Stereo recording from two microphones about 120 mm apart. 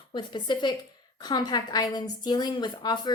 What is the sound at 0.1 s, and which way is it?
A woman's voice, 40° left (ahead or behind).